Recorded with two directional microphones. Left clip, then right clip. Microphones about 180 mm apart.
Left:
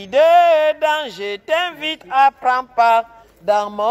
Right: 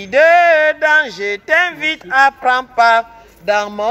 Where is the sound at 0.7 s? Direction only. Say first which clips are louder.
Right 5 dB; 45° left (ahead or behind).